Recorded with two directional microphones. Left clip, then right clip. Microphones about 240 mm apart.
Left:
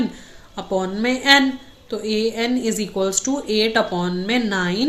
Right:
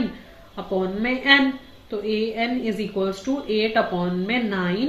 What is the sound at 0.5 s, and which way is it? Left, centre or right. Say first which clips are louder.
Speech: left 2 dB; left.